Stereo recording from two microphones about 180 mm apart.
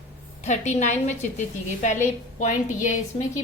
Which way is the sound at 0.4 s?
40° left (ahead or behind).